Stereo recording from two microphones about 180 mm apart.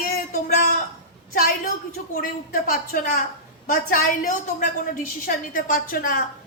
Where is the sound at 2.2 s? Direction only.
55° left (ahead or behind).